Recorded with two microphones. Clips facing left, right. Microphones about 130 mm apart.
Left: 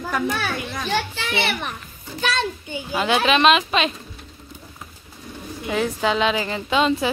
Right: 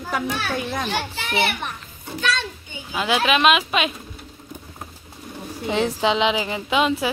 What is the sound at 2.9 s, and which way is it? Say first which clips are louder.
A woman's voice: left 1 dB; 5° right (ahead or behind).